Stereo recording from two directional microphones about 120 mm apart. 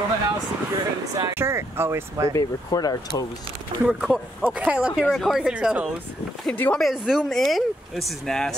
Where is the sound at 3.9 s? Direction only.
10° right (ahead or behind).